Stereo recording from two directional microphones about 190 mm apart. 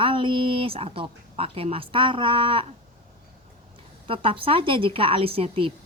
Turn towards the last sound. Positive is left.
turn(degrees=-30)  # may be behind; listen again after turning